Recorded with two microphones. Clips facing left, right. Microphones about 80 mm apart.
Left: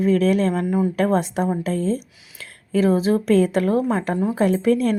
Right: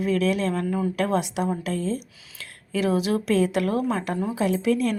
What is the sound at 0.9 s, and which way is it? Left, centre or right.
A woman's voice, left.